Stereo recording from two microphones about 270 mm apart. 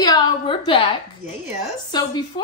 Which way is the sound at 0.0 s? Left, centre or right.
Centre.